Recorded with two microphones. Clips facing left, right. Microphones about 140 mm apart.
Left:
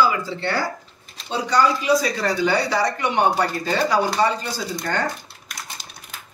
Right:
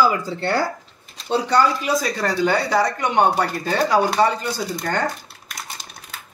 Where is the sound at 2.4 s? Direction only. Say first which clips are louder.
Right 3 dB; 50° right (ahead or behind).